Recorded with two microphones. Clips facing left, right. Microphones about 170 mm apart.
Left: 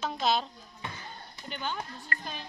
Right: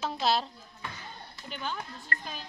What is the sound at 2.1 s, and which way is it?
Speech, 40° right (ahead or behind).